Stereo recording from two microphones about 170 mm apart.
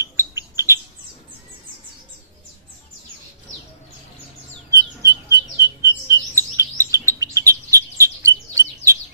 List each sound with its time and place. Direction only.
0.0 s bird: 15° right (ahead or behind)
4.7 s bird: 20° right (ahead or behind)